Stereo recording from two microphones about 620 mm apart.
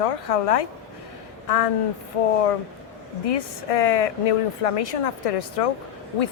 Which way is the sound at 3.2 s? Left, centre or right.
Left.